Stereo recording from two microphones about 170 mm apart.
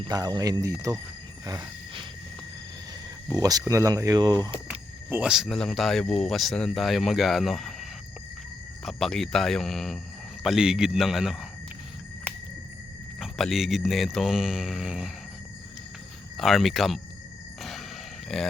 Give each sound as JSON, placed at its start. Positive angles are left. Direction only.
{"t": 0.0, "sound": "speech", "side_deg": -20}
{"t": 1.5, "sound": "a sound", "side_deg": -25}
{"t": 3.2, "sound": "speech", "side_deg": -20}
{"t": 4.7, "sound": "speech", "side_deg": -10}
{"t": 13.1, "sound": "speech", "side_deg": 0}
{"t": 16.4, "sound": "speech", "side_deg": 0}
{"t": 17.6, "sound": "a sound", "side_deg": 0}